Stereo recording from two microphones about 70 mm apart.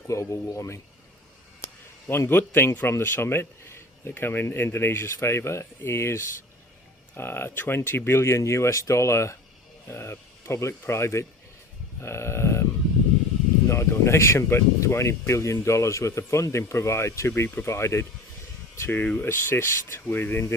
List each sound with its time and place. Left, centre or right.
0.1 s speech: left
2.0 s speech: left
11.9 s a sound: left
13.7 s speech: left